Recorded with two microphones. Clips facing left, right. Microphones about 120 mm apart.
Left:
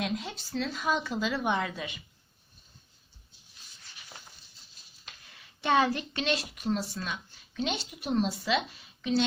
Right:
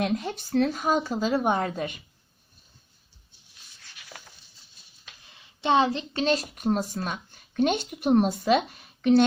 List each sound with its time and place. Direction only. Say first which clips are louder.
0.0 s a woman's voice: right 6 dB; 55° right (ahead or behind)
5.2 s a sound: right 4 dB; 20° right (ahead or behind)
6.1 s a woman's voice: right 6 dB; 40° right (ahead or behind); by 9.2 s 55° right (ahead or behind)